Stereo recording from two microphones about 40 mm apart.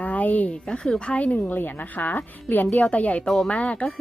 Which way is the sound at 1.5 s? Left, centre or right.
Left.